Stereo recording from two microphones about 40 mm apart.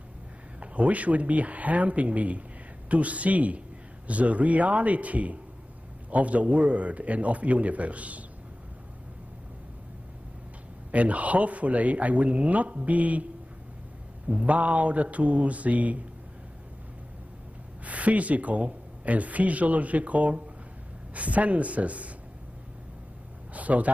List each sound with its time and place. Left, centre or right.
0.6 s speech: right
10.9 s speech: right
14.4 s speech: right
17.8 s speech: right
23.5 s a sound: right